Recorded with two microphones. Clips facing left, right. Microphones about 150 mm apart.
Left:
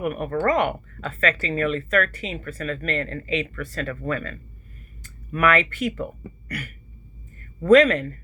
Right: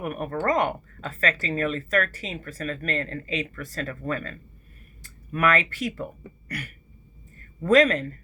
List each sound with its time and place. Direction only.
0.0 s speech: 35° right (ahead or behind)
7.6 s speech: 35° right (ahead or behind)